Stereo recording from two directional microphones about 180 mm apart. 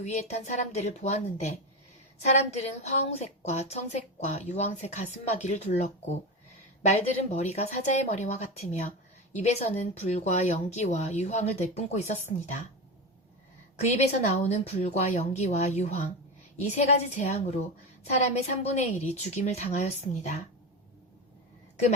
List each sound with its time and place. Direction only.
0.0 s a woman's voice: 40° left (ahead or behind)
13.7 s a woman's voice: 40° left (ahead or behind)